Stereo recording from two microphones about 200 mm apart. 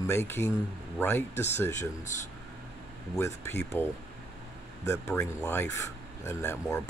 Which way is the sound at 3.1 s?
15° left (ahead or behind).